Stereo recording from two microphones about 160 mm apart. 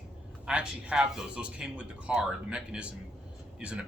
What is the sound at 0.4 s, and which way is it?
A man's voice, 5° right (ahead or behind).